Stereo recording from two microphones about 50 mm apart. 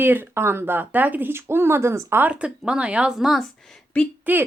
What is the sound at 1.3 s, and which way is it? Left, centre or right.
Speech, right.